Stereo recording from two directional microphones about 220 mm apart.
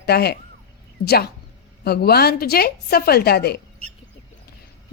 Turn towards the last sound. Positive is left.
turn(degrees=45)  # may be behind; listen again after turning